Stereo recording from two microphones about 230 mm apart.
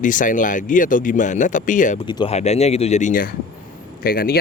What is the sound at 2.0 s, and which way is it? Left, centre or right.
Speech, centre.